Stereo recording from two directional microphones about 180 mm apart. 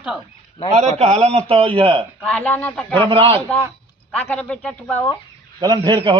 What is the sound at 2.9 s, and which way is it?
Speech, 30° right (ahead or behind).